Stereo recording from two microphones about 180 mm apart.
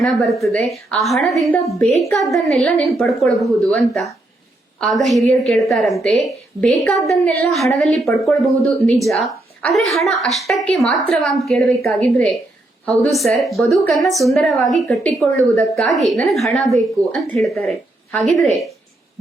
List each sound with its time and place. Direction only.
0.0 s a woman's voice: centre (ahead or behind)
14.9 s a woman's voice: 15° left (ahead or behind)
15.5 s speech: centre (ahead or behind)